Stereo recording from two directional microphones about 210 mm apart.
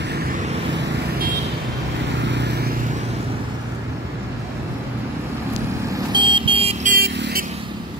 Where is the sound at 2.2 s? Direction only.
55° right (ahead or behind).